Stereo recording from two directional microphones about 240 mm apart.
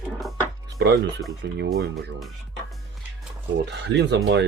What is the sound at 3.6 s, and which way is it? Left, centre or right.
Speech, right.